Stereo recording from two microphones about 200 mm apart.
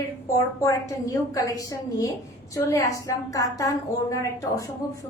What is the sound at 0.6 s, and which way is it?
A woman's voice, 15° left (ahead or behind).